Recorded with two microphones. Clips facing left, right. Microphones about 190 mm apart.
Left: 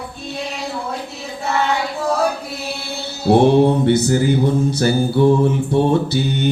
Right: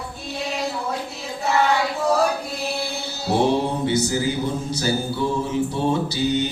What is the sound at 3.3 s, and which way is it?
Mantra, 60° left (ahead or behind).